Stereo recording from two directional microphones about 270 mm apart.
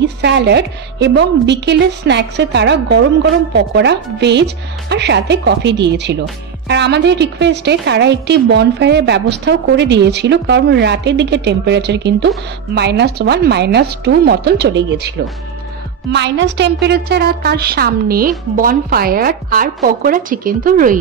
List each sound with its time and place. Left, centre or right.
0.0 s a woman's voice: right